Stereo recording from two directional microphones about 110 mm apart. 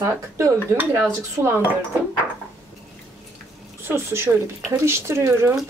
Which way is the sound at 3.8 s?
20° right (ahead or behind).